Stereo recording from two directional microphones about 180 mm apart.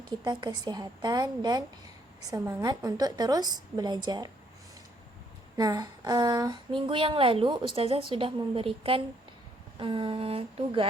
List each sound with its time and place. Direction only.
0.1 s speech: 25° right (ahead or behind)
5.5 s speech: 20° right (ahead or behind)